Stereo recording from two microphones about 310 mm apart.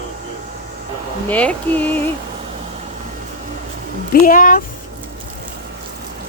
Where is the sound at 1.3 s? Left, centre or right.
Centre.